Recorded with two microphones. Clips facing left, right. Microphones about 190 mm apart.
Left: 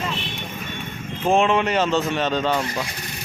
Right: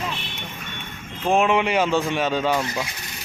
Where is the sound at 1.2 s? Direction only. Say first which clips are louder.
Left 1 dB; centre (ahead or behind).